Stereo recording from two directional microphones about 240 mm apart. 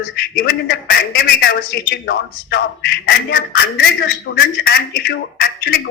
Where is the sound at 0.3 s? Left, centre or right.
Left.